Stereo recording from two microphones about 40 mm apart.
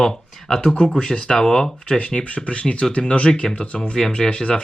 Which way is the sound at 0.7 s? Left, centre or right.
Left.